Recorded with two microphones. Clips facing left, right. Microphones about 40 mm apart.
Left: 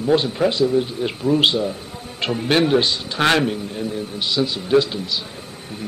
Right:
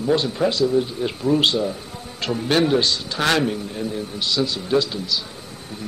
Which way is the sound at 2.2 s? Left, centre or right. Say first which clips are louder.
Left 1 dB; left.